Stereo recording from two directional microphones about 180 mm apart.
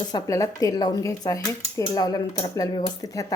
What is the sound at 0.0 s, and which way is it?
Speech, 20° left (ahead or behind).